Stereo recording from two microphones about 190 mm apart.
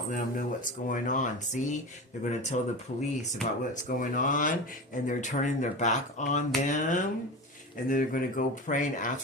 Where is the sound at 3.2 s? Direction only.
40° left (ahead or behind).